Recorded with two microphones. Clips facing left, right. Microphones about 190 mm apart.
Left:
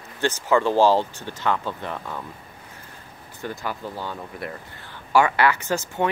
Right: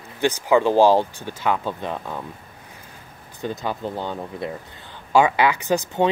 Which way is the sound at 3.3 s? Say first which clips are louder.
Right 4 dB; 20° right (ahead or behind).